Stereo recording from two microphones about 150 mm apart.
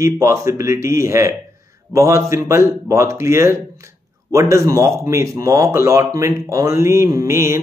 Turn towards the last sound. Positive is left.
turn(degrees=-20)  # may be behind; listen again after turning